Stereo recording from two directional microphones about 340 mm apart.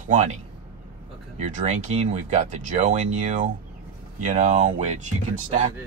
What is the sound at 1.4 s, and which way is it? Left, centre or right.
Speech, centre.